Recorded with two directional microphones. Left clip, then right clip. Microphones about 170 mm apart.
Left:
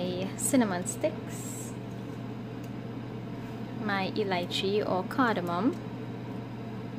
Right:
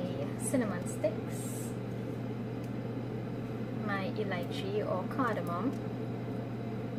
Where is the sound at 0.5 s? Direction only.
65° left (ahead or behind).